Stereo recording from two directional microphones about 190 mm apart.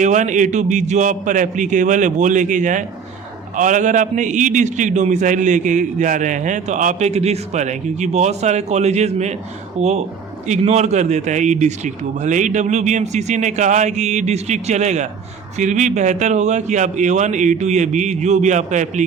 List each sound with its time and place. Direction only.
0.0 s a man's voice: 40° right (ahead or behind)